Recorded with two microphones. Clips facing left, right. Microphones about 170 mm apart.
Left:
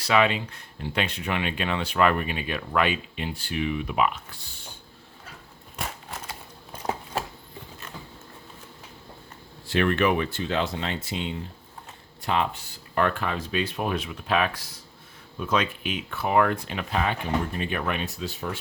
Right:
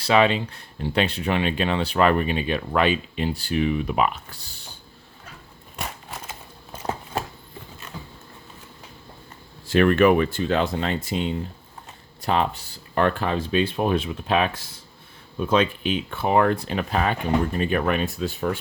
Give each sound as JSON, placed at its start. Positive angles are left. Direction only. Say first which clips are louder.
{"t": 0.0, "sound": "speech", "louder": "right 3 dB", "side_deg": -30}
{"t": 9.6, "sound": "speech", "louder": "right 6 dB", "side_deg": -45}